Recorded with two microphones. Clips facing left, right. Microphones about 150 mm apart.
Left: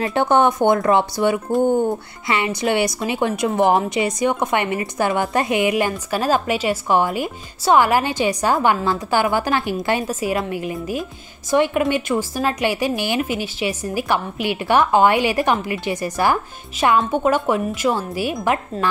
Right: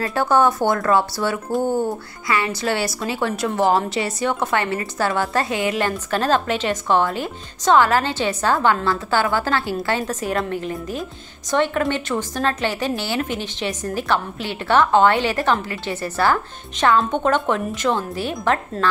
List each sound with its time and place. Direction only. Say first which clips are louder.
0.0 s a woman's voice: left 1 dB; 20° left (ahead or behind)